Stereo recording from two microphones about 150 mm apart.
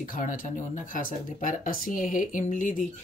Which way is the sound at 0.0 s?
60° left (ahead or behind).